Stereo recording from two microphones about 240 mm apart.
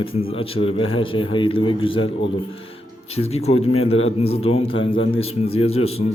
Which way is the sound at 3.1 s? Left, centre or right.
Left.